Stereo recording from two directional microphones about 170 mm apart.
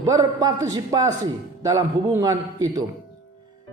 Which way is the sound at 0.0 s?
20° right (ahead or behind).